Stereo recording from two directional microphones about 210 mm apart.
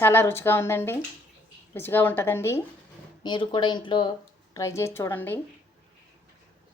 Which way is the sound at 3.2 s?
20° left (ahead or behind).